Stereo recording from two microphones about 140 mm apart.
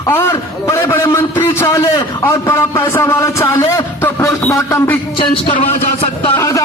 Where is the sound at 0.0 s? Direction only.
15° left (ahead or behind).